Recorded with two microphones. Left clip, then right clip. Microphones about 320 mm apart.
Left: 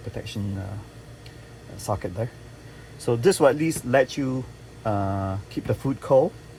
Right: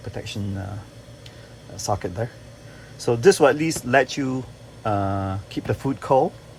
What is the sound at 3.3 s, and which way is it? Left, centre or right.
Speech, centre.